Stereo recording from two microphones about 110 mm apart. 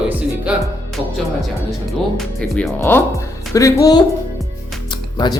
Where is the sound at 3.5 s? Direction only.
30° left (ahead or behind).